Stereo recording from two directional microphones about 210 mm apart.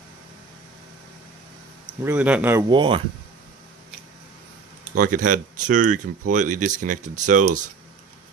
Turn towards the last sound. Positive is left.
turn(degrees=-35)  # may be behind; listen again after turning